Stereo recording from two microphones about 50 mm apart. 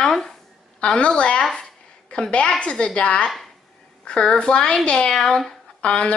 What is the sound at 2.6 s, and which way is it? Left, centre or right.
A woman's voice, centre.